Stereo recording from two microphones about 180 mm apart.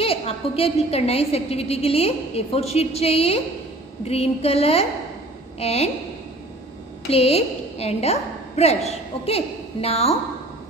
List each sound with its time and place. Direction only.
0.0 s a woman's voice: 30° left (ahead or behind)
7.1 s a woman's voice: 35° left (ahead or behind)